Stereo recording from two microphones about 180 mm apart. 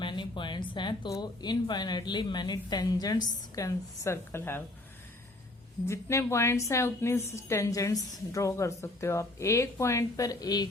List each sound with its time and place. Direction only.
0.0 s speech: 25° left (ahead or behind)
5.8 s a woman's voice: 15° left (ahead or behind)